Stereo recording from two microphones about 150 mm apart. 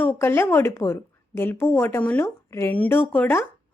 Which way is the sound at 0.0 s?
15° left (ahead or behind).